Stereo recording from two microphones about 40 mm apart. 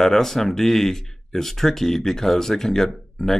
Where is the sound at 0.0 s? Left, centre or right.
Centre.